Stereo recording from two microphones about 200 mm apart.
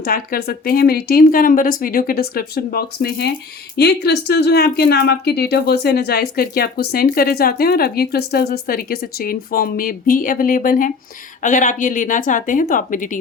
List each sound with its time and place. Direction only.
0.0 s speech: 50° left (ahead or behind)